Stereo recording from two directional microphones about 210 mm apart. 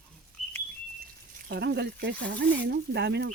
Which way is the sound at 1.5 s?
50° right (ahead or behind).